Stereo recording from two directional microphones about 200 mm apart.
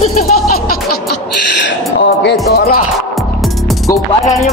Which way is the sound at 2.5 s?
50° left (ahead or behind).